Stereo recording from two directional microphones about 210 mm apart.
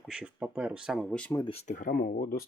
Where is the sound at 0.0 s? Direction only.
5° right (ahead or behind).